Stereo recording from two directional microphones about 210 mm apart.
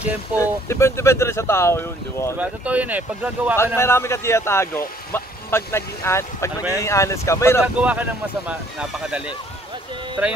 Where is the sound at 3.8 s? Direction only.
10° left (ahead or behind).